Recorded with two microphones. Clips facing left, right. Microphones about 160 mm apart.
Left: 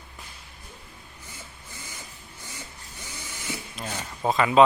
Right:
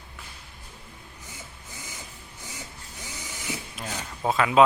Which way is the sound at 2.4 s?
15° right (ahead or behind).